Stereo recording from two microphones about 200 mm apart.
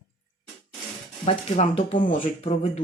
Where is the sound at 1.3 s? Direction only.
30° left (ahead or behind).